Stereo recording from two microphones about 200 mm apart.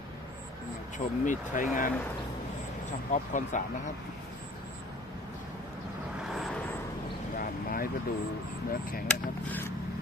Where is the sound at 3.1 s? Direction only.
40° left (ahead or behind).